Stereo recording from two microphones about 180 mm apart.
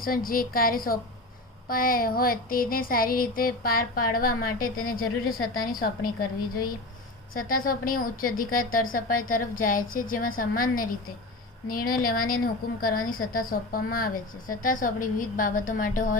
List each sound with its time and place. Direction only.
0.0 s child singing: 50° left (ahead or behind)
7.3 s child singing: 50° left (ahead or behind)